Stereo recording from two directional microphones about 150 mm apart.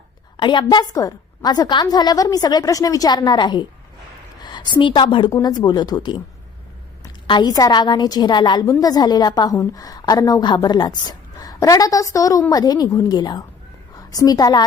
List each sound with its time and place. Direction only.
0.3 s a woman's voice: 30° left (ahead or behind)